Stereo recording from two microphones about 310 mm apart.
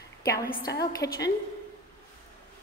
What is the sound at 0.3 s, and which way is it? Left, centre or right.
Speech, left.